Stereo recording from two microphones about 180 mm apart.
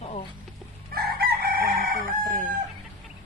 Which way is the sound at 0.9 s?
60° right (ahead or behind).